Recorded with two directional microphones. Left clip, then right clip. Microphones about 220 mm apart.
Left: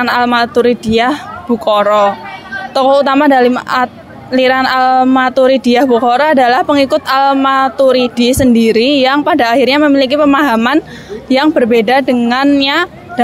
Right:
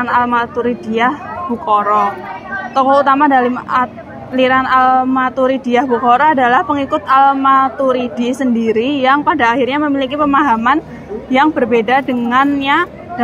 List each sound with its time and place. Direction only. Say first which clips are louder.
0.0 s a woman's voice: left 3 dB; 60° left (ahead or behind)